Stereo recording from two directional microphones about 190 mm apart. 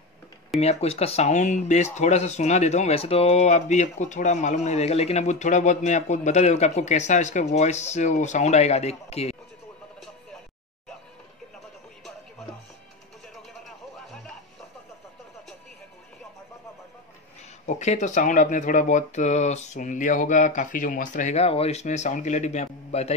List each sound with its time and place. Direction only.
0.6 s speech: 35° left (ahead or behind)
17.6 s speech: 35° left (ahead or behind)